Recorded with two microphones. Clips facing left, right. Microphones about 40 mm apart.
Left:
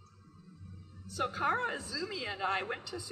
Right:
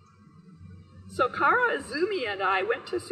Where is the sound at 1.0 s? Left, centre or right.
Right.